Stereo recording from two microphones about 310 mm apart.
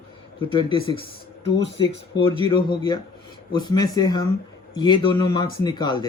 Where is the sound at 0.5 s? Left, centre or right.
Centre.